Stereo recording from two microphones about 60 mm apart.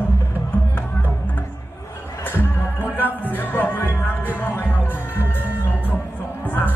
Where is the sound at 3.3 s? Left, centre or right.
Left.